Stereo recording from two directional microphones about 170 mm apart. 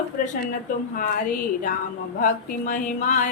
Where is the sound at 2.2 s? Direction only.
50° left (ahead or behind).